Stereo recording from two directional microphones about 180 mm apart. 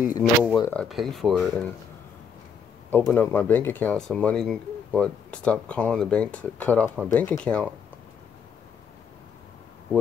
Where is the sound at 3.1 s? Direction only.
10° left (ahead or behind).